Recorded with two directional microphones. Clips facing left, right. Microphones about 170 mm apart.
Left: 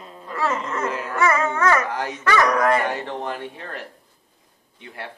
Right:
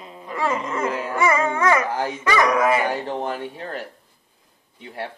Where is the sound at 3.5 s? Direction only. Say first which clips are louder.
Right 4 dB; 30° right (ahead or behind).